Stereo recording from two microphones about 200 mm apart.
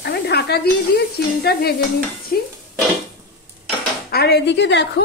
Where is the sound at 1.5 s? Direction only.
50° left (ahead or behind).